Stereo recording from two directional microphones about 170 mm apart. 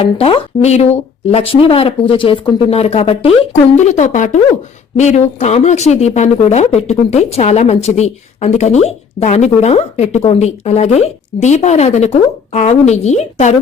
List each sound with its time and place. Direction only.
0.2 s speech: 35° left (ahead or behind)